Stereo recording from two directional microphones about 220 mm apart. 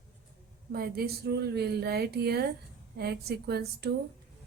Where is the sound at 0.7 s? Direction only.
45° right (ahead or behind).